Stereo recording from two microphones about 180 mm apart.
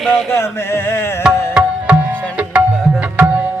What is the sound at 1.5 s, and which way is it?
Music, 5° right (ahead or behind).